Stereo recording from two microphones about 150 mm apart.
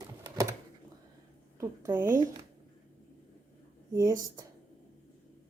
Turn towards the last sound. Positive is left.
turn(degrees=-20)  # may be behind; listen again after turning